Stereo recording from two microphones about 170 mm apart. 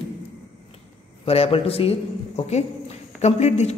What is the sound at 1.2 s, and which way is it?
A man's voice, 35° left (ahead or behind).